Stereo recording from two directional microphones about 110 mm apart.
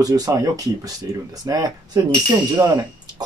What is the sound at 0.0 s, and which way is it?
Speech, 35° right (ahead or behind).